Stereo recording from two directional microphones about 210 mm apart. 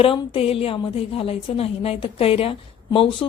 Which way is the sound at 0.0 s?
25° left (ahead or behind).